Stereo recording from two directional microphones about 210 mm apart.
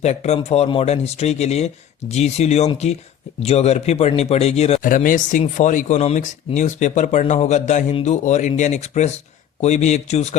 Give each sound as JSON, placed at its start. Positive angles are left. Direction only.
{"t": 0.0, "sound": "speech", "side_deg": 30}